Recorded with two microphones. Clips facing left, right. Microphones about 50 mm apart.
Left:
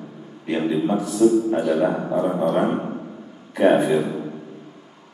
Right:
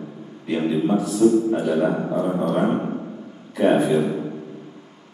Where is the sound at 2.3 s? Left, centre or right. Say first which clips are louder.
Left 2 dB; centre.